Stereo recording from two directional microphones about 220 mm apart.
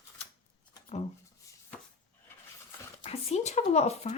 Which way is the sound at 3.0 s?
25° left (ahead or behind).